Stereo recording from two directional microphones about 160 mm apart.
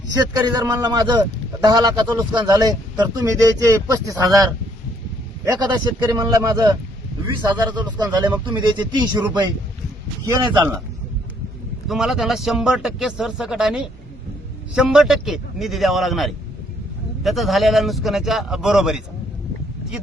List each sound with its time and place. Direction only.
0.2 s speech: 25° right (ahead or behind)
5.5 s speech: 25° right (ahead or behind)
10.2 s speech: 25° right (ahead or behind)
11.9 s speech: centre (ahead or behind)